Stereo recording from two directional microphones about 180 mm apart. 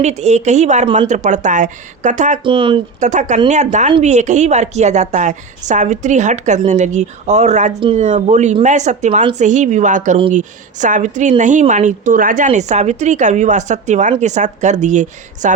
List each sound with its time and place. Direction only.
0.0 s a woman's voice: 40° right (ahead or behind)
2.4 s speech: 25° right (ahead or behind)
3.0 s a woman's voice: 40° right (ahead or behind)